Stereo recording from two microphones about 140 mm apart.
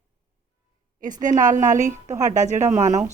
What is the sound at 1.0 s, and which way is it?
A woman's voice, 65° right (ahead or behind).